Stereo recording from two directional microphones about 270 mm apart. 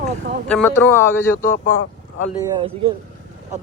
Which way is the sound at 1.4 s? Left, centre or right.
Left.